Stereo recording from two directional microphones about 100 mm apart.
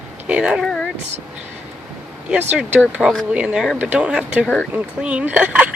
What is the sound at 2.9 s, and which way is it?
Speech, 10° right (ahead or behind).